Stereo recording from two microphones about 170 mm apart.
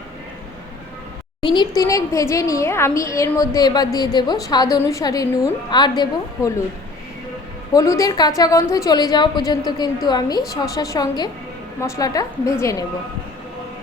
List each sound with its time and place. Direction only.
1.4 s a woman's voice: 25° left (ahead or behind)
7.7 s a woman's voice: 20° left (ahead or behind)